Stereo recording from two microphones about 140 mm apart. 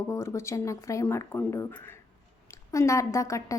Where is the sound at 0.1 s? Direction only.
20° left (ahead or behind).